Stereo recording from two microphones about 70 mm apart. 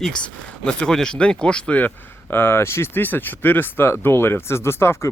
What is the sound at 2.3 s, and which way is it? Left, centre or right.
Speech, left.